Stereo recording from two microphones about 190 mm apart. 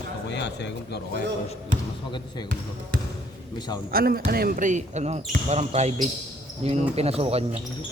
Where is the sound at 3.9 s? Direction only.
50° right (ahead or behind); by 7.6 s 30° right (ahead or behind).